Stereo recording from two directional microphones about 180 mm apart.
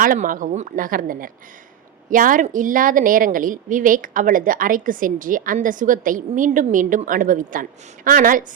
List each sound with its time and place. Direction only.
0.0 s a woman's voice: 50° right (ahead or behind)